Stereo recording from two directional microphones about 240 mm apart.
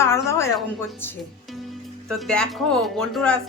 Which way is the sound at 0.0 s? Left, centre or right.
Centre.